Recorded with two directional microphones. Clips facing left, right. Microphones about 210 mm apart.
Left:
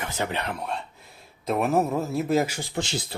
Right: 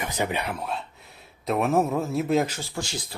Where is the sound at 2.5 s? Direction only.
20° left (ahead or behind).